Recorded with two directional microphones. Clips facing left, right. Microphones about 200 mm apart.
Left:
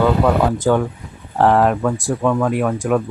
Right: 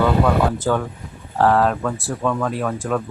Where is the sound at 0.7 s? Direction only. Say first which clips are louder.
Left 4 dB; 10° left (ahead or behind).